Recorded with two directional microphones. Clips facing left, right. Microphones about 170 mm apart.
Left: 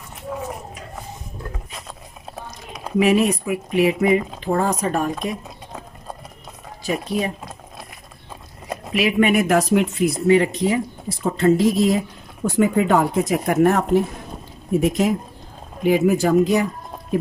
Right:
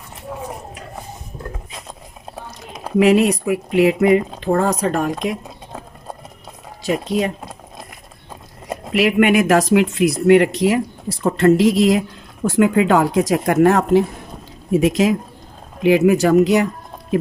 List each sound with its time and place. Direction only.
0.3 s a sound: 5° right (ahead or behind)
3.0 s speech: 75° right (ahead or behind)
6.8 s speech: 70° right (ahead or behind)
9.0 s speech: 70° right (ahead or behind)
12.5 s speech: 90° right
15.8 s speech: 80° right